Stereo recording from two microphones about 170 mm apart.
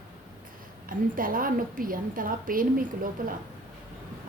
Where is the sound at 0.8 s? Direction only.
55° right (ahead or behind).